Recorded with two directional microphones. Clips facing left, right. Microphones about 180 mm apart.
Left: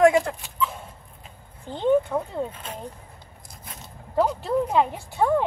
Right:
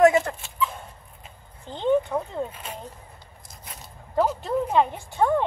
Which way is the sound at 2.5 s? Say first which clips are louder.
Left 1 dB; 10° right (ahead or behind).